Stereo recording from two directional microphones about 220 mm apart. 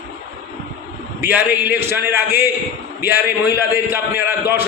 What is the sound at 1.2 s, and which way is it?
A man's voice, 10° right (ahead or behind).